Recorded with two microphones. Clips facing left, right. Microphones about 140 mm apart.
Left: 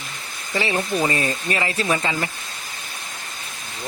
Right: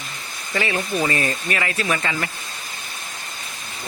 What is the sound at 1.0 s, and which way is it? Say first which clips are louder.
Speech: even; 25° left (ahead or behind).